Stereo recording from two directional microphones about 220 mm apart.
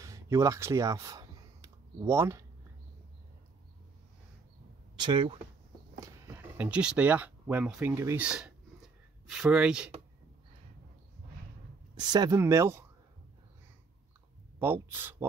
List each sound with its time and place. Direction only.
0.0 s a sound: 15° right (ahead or behind)
4.9 s speech: 20° right (ahead or behind)
5.9 s speech: 10° right (ahead or behind)
11.9 s speech: 20° right (ahead or behind)
14.6 s speech: 10° right (ahead or behind)